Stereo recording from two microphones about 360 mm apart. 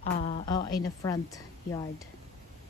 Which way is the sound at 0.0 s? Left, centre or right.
Centre.